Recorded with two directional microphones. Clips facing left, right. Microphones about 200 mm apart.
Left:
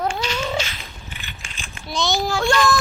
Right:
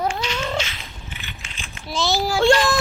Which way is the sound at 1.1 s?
45° left (ahead or behind).